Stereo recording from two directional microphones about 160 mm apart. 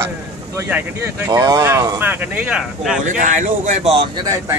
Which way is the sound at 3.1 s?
55° right (ahead or behind).